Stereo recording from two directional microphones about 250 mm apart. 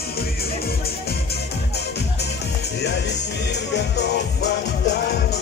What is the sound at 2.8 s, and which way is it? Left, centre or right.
Music, left.